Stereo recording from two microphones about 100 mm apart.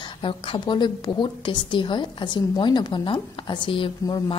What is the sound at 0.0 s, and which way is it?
A woman's voice, 55° left (ahead or behind).